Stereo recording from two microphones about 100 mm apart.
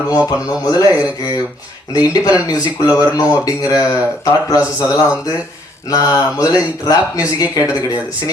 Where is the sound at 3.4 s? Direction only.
35° left (ahead or behind).